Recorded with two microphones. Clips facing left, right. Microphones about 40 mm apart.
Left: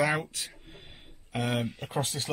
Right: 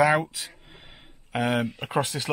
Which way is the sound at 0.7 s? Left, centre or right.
Right.